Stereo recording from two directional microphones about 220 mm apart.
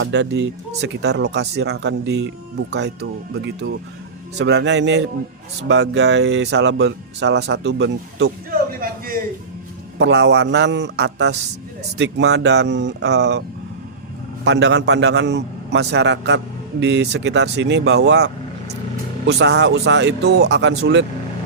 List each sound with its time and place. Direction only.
0.0 s speech: 50° right (ahead or behind)
8.8 s a sound: 40° right (ahead or behind)
10.0 s speech: 50° right (ahead or behind)
14.4 s speech: 50° right (ahead or behind)